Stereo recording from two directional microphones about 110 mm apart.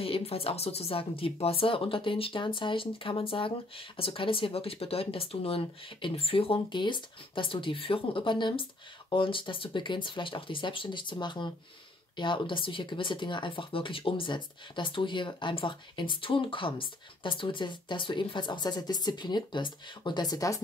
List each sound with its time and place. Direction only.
0.0 s speech: 60° left (ahead or behind); by 20.6 s 30° left (ahead or behind)